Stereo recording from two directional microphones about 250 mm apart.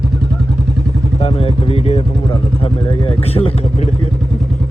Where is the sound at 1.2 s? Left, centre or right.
Left.